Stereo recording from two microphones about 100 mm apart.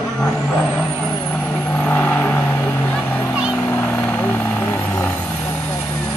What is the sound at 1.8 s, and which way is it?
Vehicle, 20° left (ahead or behind).